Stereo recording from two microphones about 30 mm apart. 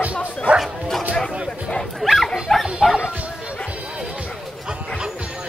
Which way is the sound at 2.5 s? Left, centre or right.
Centre.